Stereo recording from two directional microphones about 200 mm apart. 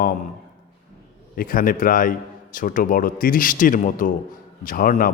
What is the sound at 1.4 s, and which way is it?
A man's voice, 45° left (ahead or behind).